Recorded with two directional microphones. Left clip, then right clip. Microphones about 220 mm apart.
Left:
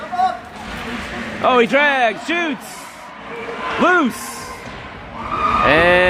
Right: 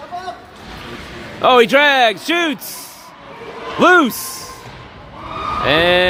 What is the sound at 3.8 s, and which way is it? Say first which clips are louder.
Speech: right 4 dB; 30° right (ahead or behind).